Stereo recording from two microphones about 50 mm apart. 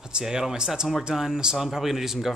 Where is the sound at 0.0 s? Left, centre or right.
Centre.